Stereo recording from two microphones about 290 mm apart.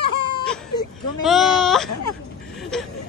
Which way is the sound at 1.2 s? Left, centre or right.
Centre.